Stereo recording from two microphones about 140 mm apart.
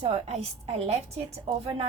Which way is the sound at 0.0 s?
50° right (ahead or behind).